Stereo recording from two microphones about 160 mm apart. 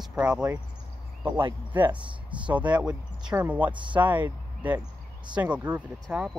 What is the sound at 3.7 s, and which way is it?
Speech, 30° right (ahead or behind).